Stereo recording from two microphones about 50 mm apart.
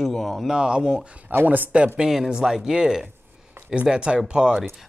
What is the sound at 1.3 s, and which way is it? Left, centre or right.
Speech, right.